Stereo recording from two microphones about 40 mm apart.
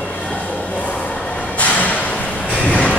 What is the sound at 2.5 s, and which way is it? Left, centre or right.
Vehicle, left.